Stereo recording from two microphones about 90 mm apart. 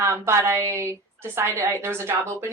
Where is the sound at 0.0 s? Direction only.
30° right (ahead or behind).